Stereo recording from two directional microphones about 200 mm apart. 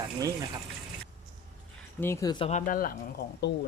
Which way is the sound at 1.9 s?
10° left (ahead or behind).